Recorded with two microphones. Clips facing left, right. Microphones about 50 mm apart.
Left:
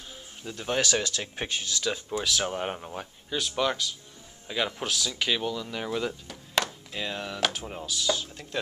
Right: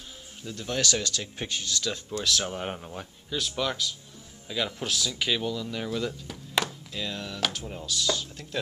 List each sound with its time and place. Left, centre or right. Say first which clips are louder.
0.4 s speech: left 2 dB; centre
1.6 s speech: left 1 dB; centre
4.8 s speech: even; centre
6.2 s music: even; centre
6.9 s speech: left 1 dB; left